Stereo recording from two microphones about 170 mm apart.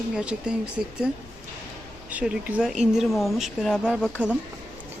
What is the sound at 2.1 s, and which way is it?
Speech, 10° right (ahead or behind).